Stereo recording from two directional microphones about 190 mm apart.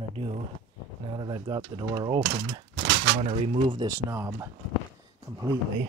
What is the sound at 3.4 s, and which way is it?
Speech, 25° right (ahead or behind).